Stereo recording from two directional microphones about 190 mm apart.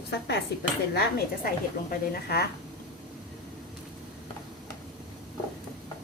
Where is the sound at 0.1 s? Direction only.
60° left (ahead or behind).